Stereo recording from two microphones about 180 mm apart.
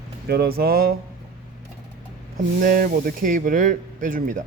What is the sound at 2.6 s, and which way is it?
Speech, 50° right (ahead or behind).